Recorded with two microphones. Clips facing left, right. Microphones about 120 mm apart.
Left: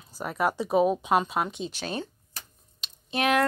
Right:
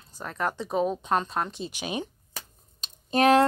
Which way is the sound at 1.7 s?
15° right (ahead or behind).